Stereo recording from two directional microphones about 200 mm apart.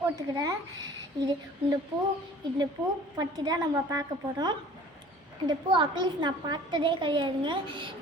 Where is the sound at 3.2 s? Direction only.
20° right (ahead or behind).